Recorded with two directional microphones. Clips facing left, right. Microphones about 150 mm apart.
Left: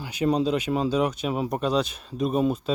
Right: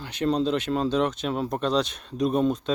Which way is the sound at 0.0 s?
10° left (ahead or behind).